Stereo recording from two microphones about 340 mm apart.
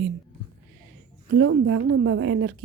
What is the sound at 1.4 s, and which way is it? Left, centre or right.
A woman's voice, right.